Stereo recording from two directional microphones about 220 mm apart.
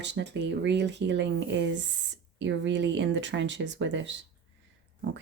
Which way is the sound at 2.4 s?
55° right (ahead or behind).